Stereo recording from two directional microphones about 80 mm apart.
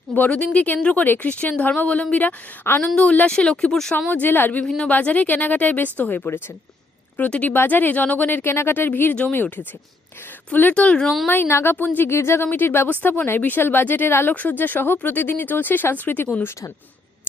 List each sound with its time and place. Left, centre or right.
0.1 s a woman's voice: centre
4.1 s a woman's voice: left
4.6 s speech: centre
4.9 s a woman's voice: centre
11.3 s a woman's voice: left